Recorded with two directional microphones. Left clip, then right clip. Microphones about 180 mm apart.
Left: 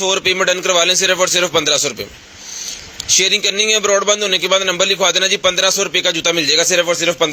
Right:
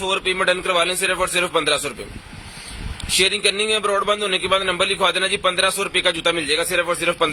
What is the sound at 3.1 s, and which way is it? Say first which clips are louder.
A man's voice: left 4 dB; 25° left (ahead or behind).